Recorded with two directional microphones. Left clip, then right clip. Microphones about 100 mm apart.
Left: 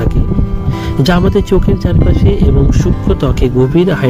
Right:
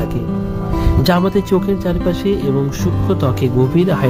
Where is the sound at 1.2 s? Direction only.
20° left (ahead or behind).